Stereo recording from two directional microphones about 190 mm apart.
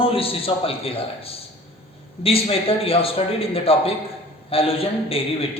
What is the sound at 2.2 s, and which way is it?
A man's voice, 30° left (ahead or behind).